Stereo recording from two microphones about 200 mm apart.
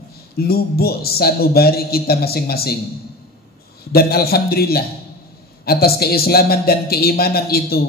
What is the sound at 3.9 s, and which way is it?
A man's voice, 50° left (ahead or behind).